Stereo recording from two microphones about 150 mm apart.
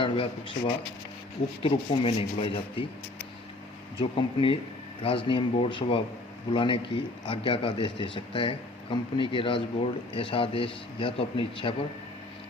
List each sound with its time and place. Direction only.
0.0 s a man's voice: 35° left (ahead or behind)
4.0 s a man's voice: 40° left (ahead or behind)